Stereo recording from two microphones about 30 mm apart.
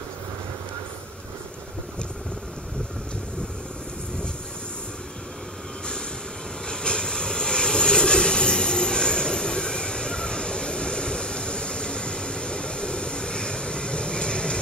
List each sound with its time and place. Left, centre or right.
6.7 s vehicle: left